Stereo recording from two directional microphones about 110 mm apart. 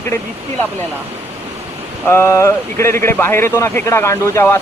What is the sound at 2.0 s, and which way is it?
Speech, 25° left (ahead or behind).